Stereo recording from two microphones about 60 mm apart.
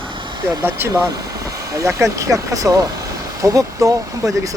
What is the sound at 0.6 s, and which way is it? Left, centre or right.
Speech, right.